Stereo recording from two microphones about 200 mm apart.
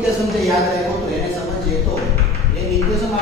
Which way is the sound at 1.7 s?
Centre (ahead or behind).